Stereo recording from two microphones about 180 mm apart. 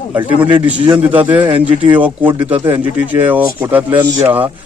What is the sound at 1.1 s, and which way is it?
A man's voice, 10° right (ahead or behind).